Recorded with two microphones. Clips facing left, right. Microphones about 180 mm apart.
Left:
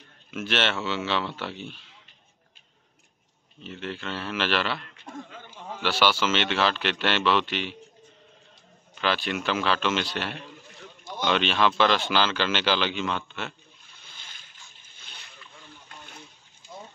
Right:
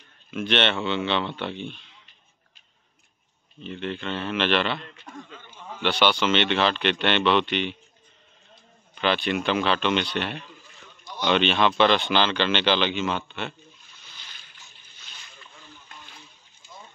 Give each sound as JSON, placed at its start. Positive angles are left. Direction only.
{"t": 0.3, "sound": "speech", "side_deg": 5}
{"t": 3.6, "sound": "speech", "side_deg": 5}
{"t": 5.8, "sound": "speech", "side_deg": 5}
{"t": 8.9, "sound": "speech", "side_deg": 0}
{"t": 13.9, "sound": "a sound", "side_deg": 50}
{"t": 14.8, "sound": "splash", "side_deg": 55}